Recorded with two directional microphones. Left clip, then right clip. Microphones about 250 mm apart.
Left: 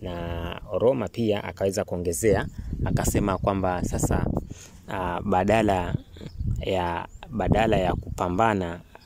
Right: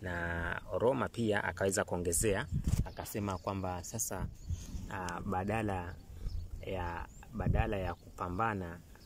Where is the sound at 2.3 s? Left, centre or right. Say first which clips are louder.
Left 10 dB; left.